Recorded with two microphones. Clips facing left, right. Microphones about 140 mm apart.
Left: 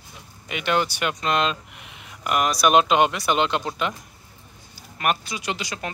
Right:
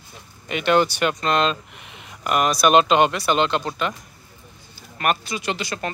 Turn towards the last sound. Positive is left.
turn(degrees=15)  # may be behind; listen again after turning